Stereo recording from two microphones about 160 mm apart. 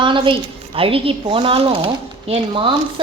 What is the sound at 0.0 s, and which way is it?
A woman's voice, 30° right (ahead or behind).